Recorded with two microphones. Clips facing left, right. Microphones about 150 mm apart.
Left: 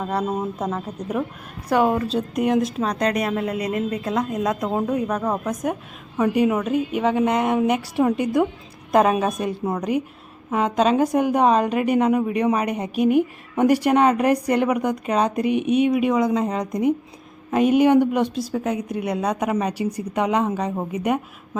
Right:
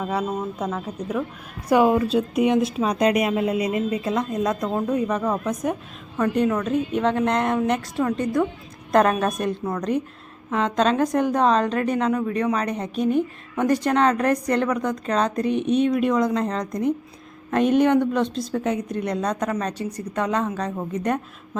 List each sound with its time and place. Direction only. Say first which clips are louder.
0.0 s a woman's voice: left 1 dB; centre (ahead or behind)
1.7 s a woman's voice: right 2 dB; 10° right (ahead or behind); by 21.6 s 10° left (ahead or behind)